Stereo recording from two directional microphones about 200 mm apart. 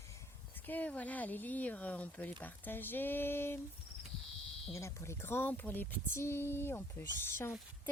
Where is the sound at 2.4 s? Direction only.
10° left (ahead or behind).